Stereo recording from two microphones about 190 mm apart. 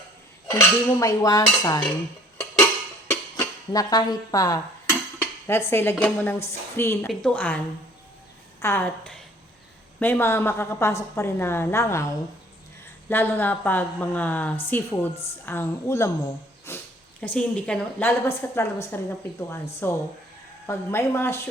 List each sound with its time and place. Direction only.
0.5 s dishes: 20° left (ahead or behind)
3.1 s dishes: 20° left (ahead or behind)
5.2 s a woman's voice: 15° left (ahead or behind)
7.1 s a woman's voice: 5° left (ahead or behind)
8.6 s a woman's voice: 10° left (ahead or behind)
13.1 s a woman's voice: 10° left (ahead or behind)